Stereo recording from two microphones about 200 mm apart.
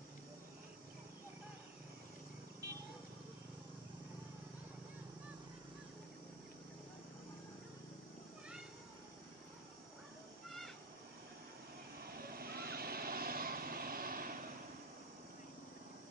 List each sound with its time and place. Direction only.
12.1 s vehicle: 50° right (ahead or behind)